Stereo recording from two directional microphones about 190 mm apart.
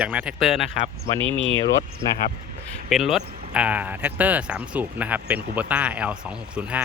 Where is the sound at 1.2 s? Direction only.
30° right (ahead or behind).